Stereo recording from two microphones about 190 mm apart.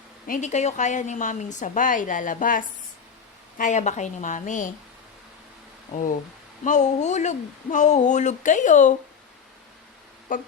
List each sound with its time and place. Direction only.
0.3 s a woman's voice: 40° left (ahead or behind)
5.9 s a woman's voice: 45° left (ahead or behind)
10.3 s speech: 45° left (ahead or behind)